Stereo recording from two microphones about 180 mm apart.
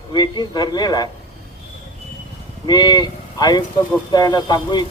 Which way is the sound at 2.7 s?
25° left (ahead or behind).